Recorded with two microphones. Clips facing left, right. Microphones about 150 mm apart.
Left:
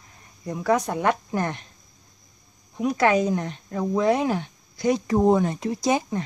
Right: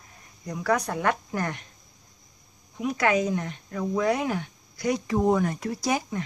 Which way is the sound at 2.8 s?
35° left (ahead or behind).